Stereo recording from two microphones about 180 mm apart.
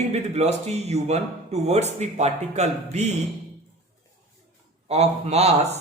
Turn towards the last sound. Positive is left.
turn(degrees=-35)  # may be behind; listen again after turning